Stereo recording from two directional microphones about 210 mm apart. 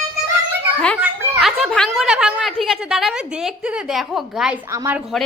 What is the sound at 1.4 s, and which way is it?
A woman's voice, centre (ahead or behind).